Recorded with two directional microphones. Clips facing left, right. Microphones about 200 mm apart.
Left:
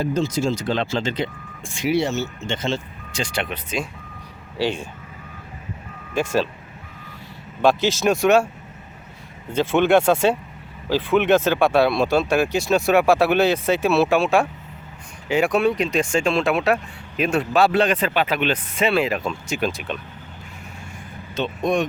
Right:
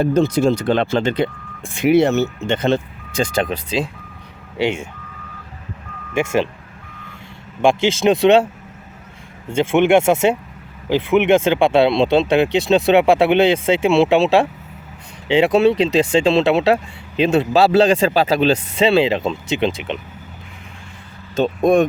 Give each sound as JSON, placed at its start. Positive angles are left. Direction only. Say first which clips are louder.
{"t": 0.0, "sound": "speech", "louder": "right 6 dB", "side_deg": -60}
{"t": 3.4, "sound": "speech", "louder": "right 6 dB", "side_deg": -35}
{"t": 7.6, "sound": "speech", "louder": "right 3 dB", "side_deg": -25}
{"t": 9.5, "sound": "speech", "louder": "right 3 dB", "side_deg": -25}
{"t": 21.3, "sound": "speech", "louder": "right 7 dB", "side_deg": -50}